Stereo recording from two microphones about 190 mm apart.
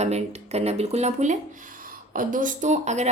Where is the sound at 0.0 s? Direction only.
35° right (ahead or behind).